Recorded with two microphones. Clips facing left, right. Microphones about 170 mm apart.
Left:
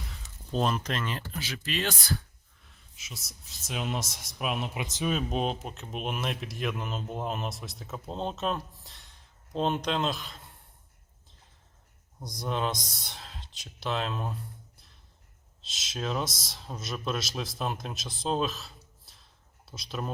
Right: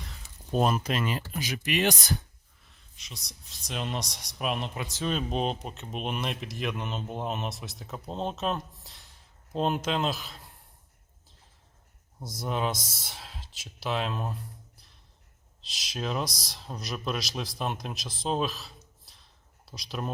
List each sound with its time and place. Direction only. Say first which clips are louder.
0.5 s speech: right 3 dB; 10° right (ahead or behind)
2.6 s speech: left 1 dB; centre (ahead or behind)
4.8 s speech: left 1 dB; 15° left (ahead or behind)
5.1 s speech: right 1 dB; centre (ahead or behind)
12.2 s speech: right 1 dB; 5° right (ahead or behind)
19.0 s a sound: even; centre (ahead or behind)